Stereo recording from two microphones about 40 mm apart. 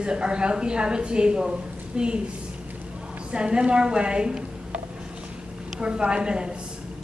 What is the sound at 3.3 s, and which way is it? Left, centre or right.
A woman's voice, right.